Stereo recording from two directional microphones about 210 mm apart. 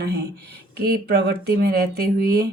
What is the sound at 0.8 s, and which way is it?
Speech, 50° right (ahead or behind).